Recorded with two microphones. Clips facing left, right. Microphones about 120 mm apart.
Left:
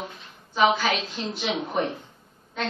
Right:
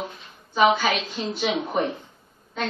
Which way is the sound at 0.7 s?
5° right (ahead or behind).